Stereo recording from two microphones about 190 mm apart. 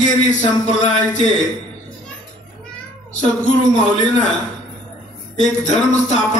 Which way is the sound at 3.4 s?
40° left (ahead or behind).